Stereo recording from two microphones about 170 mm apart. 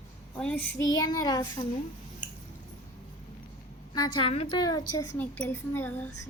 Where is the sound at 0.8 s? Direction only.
20° left (ahead or behind).